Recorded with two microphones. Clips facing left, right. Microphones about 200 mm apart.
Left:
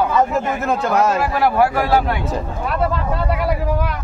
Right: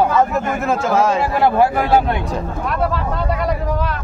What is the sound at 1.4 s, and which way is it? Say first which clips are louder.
Speech: right 1 dB; 25° right (ahead or behind).